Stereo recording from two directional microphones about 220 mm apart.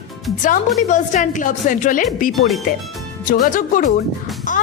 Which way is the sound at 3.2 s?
35° left (ahead or behind).